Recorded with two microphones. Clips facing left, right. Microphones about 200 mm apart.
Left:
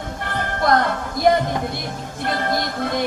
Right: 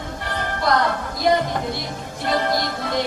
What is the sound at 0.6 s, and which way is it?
Music, 55° left (ahead or behind).